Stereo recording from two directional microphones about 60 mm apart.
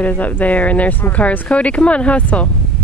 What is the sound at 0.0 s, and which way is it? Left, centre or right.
Speech, left.